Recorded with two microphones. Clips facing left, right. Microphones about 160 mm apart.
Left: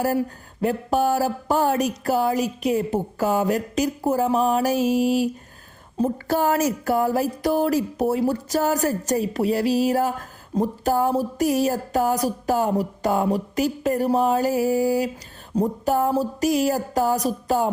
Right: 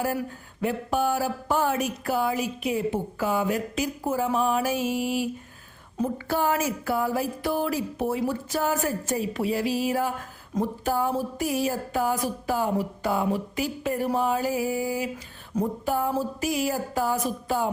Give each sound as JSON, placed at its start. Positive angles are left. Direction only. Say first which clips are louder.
{"t": 0.0, "sound": "speech", "louder": "left 5 dB", "side_deg": 40}